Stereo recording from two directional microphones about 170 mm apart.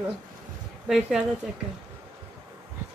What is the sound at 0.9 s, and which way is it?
Speech, 5° right (ahead or behind).